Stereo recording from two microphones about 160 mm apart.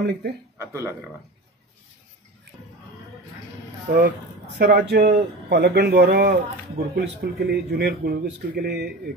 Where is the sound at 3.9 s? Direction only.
60° right (ahead or behind).